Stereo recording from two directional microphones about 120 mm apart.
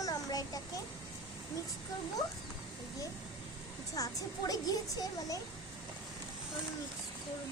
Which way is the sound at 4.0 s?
30° left (ahead or behind).